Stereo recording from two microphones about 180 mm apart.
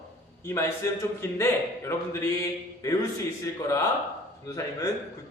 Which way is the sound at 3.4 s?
15° left (ahead or behind).